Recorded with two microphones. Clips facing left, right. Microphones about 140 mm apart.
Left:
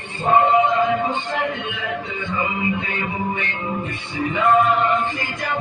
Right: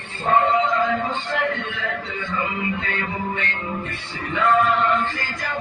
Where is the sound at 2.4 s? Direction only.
15° left (ahead or behind).